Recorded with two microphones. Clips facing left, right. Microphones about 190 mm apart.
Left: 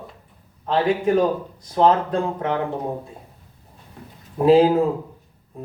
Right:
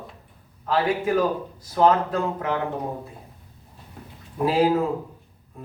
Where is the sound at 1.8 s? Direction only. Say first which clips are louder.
Left 2 dB; 30° left (ahead or behind).